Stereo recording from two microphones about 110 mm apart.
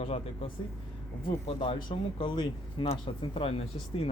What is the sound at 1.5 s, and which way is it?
Speech, 50° left (ahead or behind).